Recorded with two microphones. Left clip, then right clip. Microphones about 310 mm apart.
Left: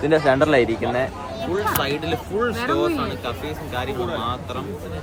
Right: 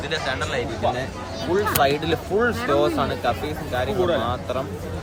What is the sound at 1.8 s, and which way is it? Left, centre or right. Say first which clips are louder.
Speech: right 3 dB; centre.